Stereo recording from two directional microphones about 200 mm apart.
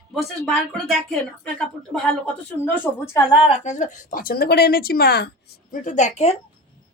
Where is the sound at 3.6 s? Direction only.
35° left (ahead or behind).